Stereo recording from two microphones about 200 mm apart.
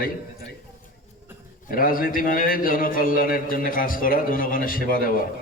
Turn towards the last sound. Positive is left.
turn(degrees=45)  # may be behind; listen again after turning